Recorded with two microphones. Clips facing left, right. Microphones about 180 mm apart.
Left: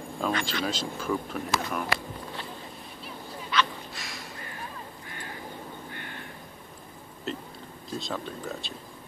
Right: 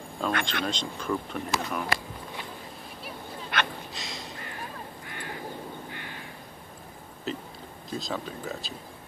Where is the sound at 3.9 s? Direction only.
20° right (ahead or behind).